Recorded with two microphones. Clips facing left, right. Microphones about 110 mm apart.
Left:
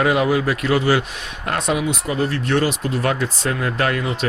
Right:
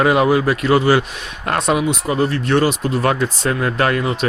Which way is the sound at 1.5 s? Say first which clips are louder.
Right 4 dB; 55° right (ahead or behind).